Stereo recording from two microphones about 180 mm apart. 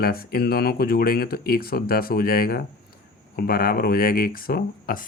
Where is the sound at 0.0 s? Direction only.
55° left (ahead or behind).